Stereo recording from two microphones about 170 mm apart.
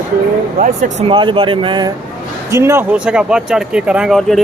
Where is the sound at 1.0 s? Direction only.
30° right (ahead or behind).